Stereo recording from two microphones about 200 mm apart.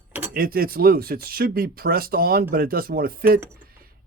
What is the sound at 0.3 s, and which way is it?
Speech, 45° right (ahead or behind).